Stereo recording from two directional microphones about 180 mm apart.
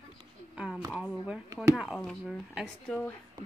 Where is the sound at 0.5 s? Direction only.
5° right (ahead or behind).